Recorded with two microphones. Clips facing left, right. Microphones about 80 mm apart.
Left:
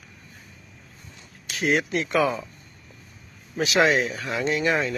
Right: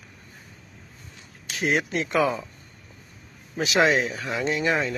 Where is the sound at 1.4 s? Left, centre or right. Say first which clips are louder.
Left 1 dB; right.